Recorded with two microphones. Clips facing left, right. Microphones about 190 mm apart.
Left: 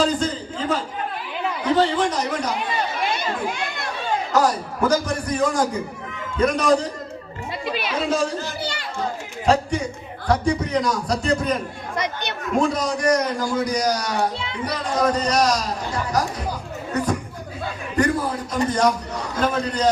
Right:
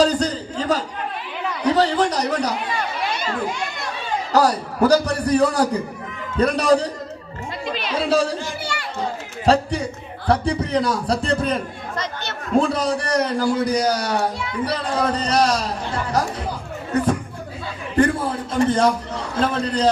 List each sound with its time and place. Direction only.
0.0 s a sound: 40° right (ahead or behind)
1.7 s a man's voice: 35° right (ahead or behind)
4.3 s a man's voice: 35° right (ahead or behind)
7.6 s speech: 5° left (ahead or behind)
7.9 s a man's voice: 35° right (ahead or behind)
9.5 s a man's voice: 35° right (ahead or behind)
11.9 s speech: 15° left (ahead or behind)
12.5 s a man's voice: 30° right (ahead or behind)
17.9 s a man's voice: 30° right (ahead or behind)